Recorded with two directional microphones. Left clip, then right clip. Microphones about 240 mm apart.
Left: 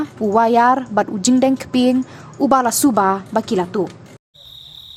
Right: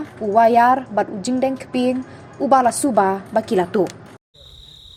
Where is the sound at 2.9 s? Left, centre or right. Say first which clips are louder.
Left 1 dB; centre.